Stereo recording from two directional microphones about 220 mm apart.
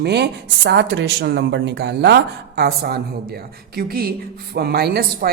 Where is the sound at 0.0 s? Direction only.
50° right (ahead or behind).